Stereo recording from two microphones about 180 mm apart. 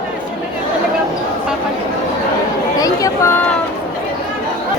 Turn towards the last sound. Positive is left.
turn(degrees=15)  # may be behind; listen again after turning